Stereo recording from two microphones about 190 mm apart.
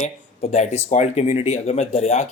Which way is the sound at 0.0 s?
40° left (ahead or behind).